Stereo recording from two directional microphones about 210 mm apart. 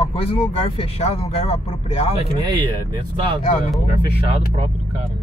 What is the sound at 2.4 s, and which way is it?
Speech, 20° right (ahead or behind).